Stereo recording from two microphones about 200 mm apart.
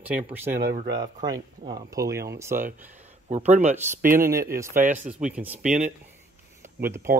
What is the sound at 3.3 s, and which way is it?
Speech, 35° right (ahead or behind).